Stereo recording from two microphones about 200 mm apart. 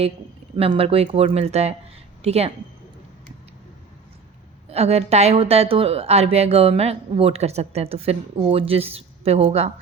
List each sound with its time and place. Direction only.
0.5 s a woman's voice: 25° right (ahead or behind)
4.7 s a woman's voice: 30° right (ahead or behind)